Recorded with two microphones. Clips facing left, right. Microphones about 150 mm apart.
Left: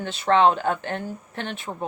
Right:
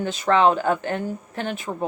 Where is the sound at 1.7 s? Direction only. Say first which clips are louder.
Right 3 dB; 15° right (ahead or behind).